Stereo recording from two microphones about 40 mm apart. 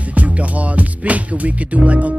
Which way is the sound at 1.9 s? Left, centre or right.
Right.